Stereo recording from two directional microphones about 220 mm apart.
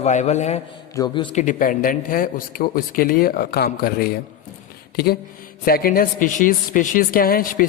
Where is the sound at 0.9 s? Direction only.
20° left (ahead or behind).